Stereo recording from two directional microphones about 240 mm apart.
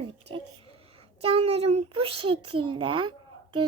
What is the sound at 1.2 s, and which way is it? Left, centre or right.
A child's voice, right.